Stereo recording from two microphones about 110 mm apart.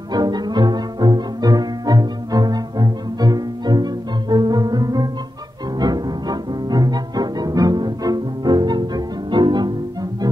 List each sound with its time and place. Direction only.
0.1 s bowed string instrument: 40° right (ahead or behind)
5.8 s music: 40° right (ahead or behind)